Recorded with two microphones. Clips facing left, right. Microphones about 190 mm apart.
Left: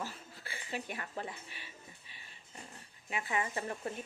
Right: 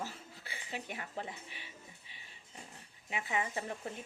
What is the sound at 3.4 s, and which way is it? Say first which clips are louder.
Cutlery: left 1 dB; 10° right (ahead or behind).